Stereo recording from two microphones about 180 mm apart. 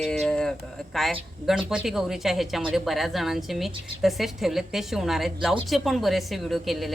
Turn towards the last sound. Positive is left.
turn(degrees=0)  # may be behind; listen again after turning